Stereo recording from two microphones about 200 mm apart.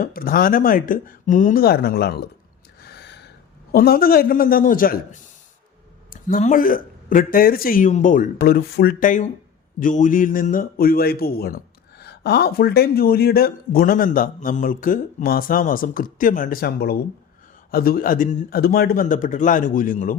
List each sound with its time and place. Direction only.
0.0 s speech: 45° left (ahead or behind)
2.8 s gasp: 55° left (ahead or behind)
3.7 s speech: 50° left (ahead or behind)